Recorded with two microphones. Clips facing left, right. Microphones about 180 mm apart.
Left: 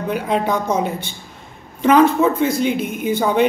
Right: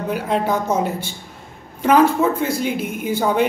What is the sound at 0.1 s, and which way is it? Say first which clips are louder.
Speech: left 1 dB; 5° right (ahead or behind).